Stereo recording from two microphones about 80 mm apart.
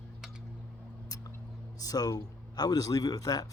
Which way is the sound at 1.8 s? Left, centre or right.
Left.